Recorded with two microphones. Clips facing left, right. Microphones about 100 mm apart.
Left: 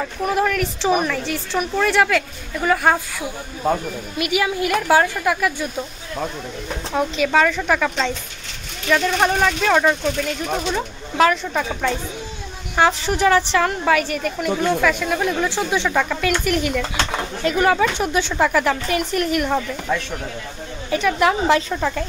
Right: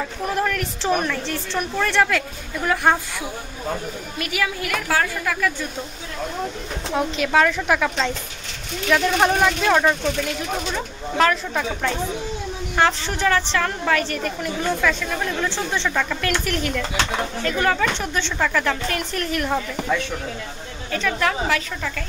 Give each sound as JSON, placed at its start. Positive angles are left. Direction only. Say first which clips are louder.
{"t": 0.3, "sound": "a woman's voice", "louder": "left 4 dB", "side_deg": 5}
{"t": 4.2, "sound": "a woman's voice", "louder": "left 5 dB", "side_deg": 20}
{"t": 6.9, "sound": "a woman's voice", "louder": "left 2 dB", "side_deg": 0}
{"t": 21.5, "sound": "a woman's voice", "louder": "left 7 dB", "side_deg": 30}